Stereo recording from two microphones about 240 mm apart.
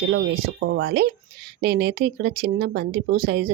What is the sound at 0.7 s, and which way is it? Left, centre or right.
Speech, right.